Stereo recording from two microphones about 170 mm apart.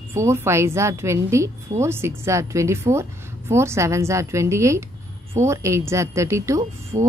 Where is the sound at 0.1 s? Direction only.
15° right (ahead or behind).